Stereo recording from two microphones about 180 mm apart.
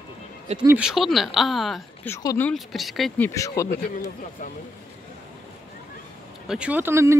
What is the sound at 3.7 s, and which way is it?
Speech, 65° left (ahead or behind).